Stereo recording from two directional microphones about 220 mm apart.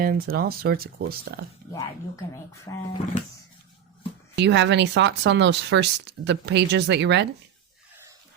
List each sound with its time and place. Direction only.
0.0 s speech: 45° right (ahead or behind)
2.7 s speech: 20° left (ahead or behind)
4.4 s speech: 55° right (ahead or behind)